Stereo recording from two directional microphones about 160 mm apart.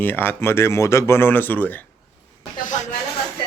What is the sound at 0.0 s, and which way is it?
A man's voice, 10° left (ahead or behind).